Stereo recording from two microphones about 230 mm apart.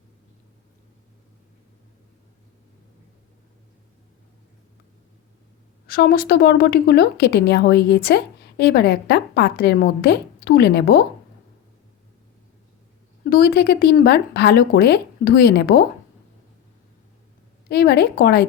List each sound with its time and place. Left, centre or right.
5.9 s a woman's voice: left
13.3 s a woman's voice: left
17.7 s a woman's voice: left